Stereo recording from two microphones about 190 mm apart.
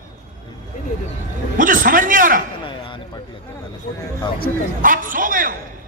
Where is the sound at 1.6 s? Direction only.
45° right (ahead or behind).